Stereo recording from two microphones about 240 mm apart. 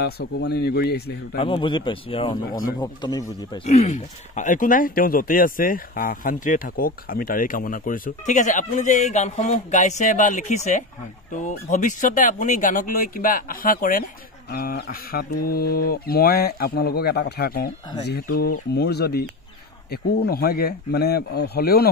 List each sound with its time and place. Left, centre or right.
0.0 s speech: left
1.4 s a man's voice: left
3.6 s speech: left